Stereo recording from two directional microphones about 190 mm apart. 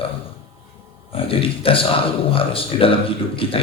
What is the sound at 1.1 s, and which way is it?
A man's voice, 30° left (ahead or behind).